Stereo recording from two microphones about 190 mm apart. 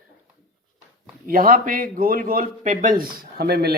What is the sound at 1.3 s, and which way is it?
Speech, 50° right (ahead or behind).